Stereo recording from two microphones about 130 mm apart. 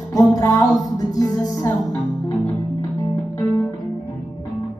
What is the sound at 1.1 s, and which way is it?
Music, 30° left (ahead or behind).